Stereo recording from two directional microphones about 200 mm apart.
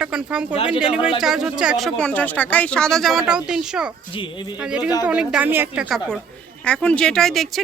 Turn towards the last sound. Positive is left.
turn(degrees=0)  # may be behind; listen again after turning